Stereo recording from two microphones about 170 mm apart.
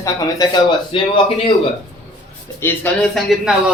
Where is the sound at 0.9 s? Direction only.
30° left (ahead or behind).